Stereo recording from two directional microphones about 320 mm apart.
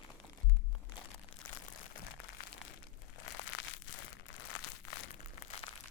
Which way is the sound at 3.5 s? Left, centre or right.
Left.